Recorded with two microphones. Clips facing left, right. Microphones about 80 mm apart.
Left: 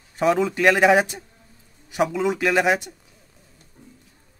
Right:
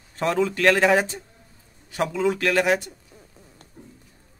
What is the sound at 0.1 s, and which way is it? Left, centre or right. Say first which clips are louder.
A man's voice: left 3 dB; centre.